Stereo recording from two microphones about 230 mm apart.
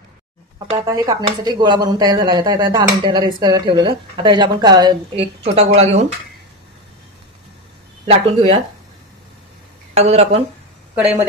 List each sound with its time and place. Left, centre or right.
0.7 s speech: centre
8.0 s speech: right
9.9 s speech: right